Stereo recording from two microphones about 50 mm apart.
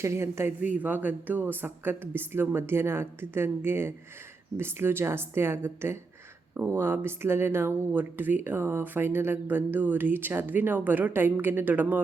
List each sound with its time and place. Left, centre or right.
0.0 s speech: right
0.8 s speech: right